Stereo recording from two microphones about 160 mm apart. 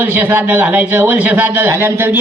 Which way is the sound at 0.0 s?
10° right (ahead or behind).